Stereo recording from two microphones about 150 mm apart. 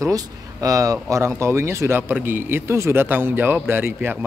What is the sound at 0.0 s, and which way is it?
Speech, 20° right (ahead or behind).